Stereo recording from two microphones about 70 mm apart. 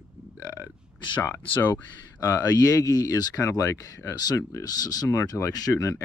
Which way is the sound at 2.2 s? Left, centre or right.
Left.